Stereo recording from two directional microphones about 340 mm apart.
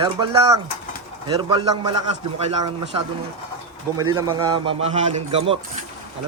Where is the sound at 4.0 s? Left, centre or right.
Centre.